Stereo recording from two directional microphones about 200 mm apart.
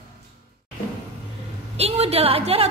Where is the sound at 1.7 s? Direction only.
30° right (ahead or behind).